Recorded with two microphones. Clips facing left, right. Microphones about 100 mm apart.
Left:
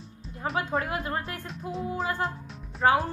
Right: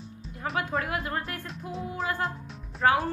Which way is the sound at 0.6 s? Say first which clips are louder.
Left 1 dB; 25° left (ahead or behind).